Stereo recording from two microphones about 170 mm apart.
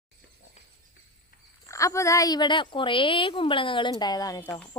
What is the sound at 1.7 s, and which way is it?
A woman's voice, 15° left (ahead or behind).